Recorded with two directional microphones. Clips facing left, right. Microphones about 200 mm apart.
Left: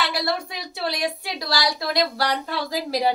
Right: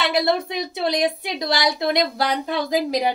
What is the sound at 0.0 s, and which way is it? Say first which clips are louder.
A woman's voice: right 5 dB; 20° right (ahead or behind).